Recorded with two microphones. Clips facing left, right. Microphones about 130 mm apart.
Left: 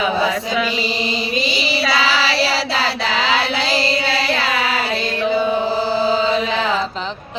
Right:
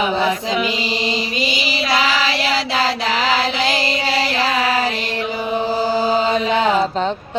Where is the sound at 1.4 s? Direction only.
35° left (ahead or behind).